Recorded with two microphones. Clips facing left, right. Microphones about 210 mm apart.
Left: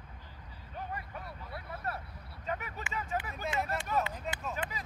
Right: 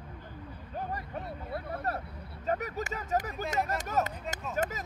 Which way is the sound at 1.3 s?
55° right (ahead or behind).